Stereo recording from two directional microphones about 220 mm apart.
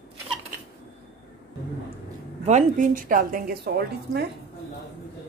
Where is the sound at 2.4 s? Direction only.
35° right (ahead or behind).